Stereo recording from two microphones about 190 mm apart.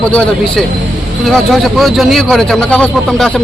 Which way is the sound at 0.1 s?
5° left (ahead or behind).